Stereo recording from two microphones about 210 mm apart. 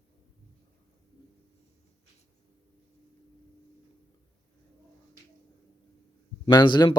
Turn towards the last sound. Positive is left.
turn(degrees=20)  # may be behind; listen again after turning